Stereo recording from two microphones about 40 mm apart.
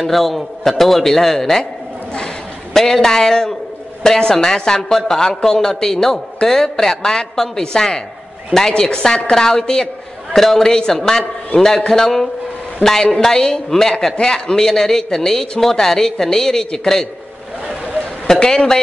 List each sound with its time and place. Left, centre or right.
0.0 s a man's voice: centre
2.7 s a man's voice: centre
18.3 s a man's voice: centre